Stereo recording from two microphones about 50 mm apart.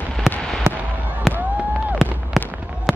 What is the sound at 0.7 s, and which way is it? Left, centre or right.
Fireworks, right.